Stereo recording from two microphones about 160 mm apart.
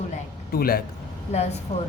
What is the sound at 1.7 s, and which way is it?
Speech, 40° left (ahead or behind).